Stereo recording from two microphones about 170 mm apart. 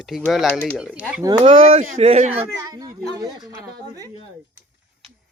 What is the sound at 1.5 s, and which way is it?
Speech, 55° right (ahead or behind).